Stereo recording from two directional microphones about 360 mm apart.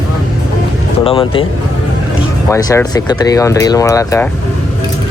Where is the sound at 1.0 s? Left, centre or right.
Centre.